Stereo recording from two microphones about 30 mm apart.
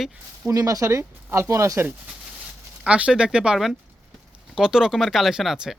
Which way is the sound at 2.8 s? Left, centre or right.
Right.